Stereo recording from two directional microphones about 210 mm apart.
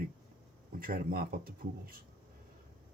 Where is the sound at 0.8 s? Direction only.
45° right (ahead or behind).